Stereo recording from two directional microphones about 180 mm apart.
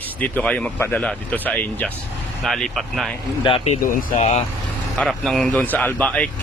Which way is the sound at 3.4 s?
35° left (ahead or behind).